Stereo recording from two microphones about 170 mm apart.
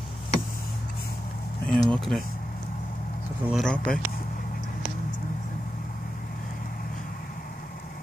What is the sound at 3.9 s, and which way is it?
Vehicle, 60° left (ahead or behind).